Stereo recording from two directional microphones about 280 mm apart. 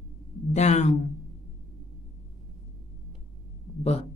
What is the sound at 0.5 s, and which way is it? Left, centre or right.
Speech, left.